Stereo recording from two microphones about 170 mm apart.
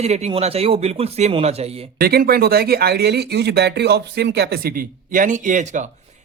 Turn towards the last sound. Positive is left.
turn(degrees=-45)  # may be behind; listen again after turning